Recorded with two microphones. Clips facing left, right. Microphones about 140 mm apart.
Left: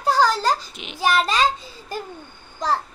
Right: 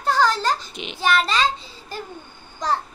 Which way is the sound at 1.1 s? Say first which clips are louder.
Even; 40° left (ahead or behind).